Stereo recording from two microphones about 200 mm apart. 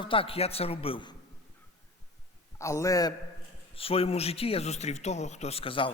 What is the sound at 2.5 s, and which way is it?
Speech, 15° left (ahead or behind).